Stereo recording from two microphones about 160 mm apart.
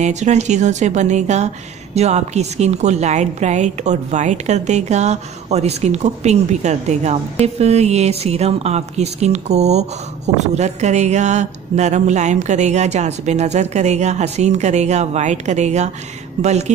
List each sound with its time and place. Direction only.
0.0 s speech: 45° right (ahead or behind)